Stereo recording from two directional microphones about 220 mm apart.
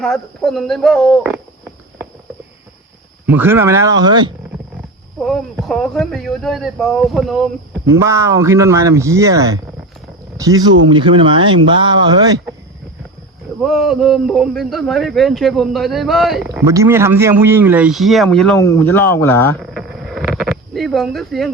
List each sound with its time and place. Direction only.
0.0 s speech: centre (ahead or behind)
3.2 s speech: 10° right (ahead or behind)
5.2 s speech: centre (ahead or behind)
7.9 s speech: 10° right (ahead or behind)
13.6 s speech: centre (ahead or behind)
16.5 s speech: 15° right (ahead or behind); by 19.5 s 10° left (ahead or behind)
19.7 s a sound: centre (ahead or behind)